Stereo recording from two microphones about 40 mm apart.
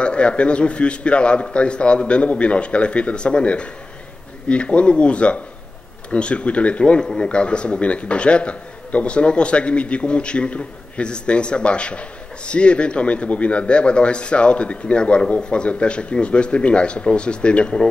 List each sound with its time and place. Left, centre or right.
0.0 s a man's voice: left